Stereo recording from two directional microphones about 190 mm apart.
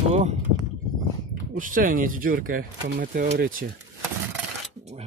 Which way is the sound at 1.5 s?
45° right (ahead or behind).